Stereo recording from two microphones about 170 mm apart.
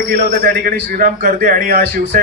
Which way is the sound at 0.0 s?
60° right (ahead or behind).